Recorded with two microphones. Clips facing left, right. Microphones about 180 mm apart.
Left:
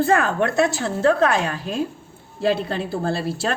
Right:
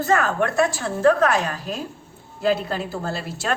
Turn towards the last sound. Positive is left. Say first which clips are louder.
# left 5 dB
turn(degrees=30)  # may be behind; listen again after turning